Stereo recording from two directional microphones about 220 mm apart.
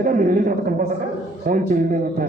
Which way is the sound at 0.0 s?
40° right (ahead or behind).